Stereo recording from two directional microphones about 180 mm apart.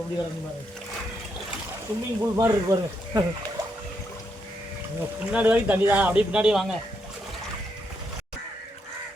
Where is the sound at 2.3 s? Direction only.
20° right (ahead or behind).